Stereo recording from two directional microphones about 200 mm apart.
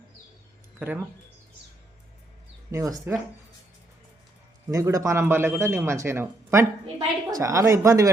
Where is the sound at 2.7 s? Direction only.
15° right (ahead or behind).